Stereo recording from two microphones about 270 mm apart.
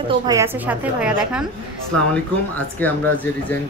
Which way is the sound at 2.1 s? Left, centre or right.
Centre.